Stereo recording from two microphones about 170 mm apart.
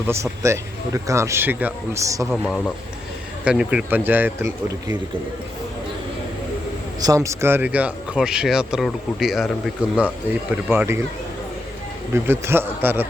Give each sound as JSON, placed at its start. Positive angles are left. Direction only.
{"t": 0.1, "sound": "speech", "side_deg": -15}
{"t": 2.3, "sound": "speech", "side_deg": 0}
{"t": 7.0, "sound": "speech", "side_deg": -20}
{"t": 12.1, "sound": "speech", "side_deg": -15}